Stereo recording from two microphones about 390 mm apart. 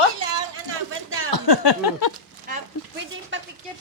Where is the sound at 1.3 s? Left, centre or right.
Left.